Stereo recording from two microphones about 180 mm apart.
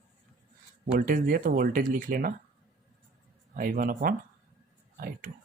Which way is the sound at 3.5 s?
50° right (ahead or behind).